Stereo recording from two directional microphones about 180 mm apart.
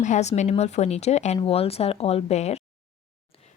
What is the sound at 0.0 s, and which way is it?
A woman's voice, 40° left (ahead or behind).